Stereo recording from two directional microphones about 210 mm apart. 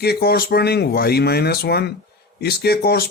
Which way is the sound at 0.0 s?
50° left (ahead or behind).